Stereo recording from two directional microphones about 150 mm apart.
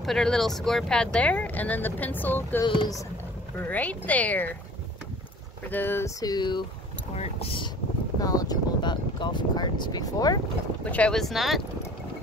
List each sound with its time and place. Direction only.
0.0 s speech: 5° left (ahead or behind)
2.6 s speech: 30° left (ahead or behind)
3.6 s speech: 10° left (ahead or behind)
5.7 s speech: 15° left (ahead or behind); by 6.6 s 30° left (ahead or behind)
7.2 s speech: 40° left (ahead or behind)
8.2 s speech: 25° left (ahead or behind)
10.8 s speech: 10° left (ahead or behind)